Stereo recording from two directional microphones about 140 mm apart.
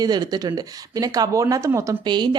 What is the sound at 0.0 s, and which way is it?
Speech, 30° right (ahead or behind).